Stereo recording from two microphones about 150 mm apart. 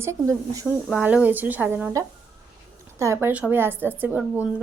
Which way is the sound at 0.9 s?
5° right (ahead or behind).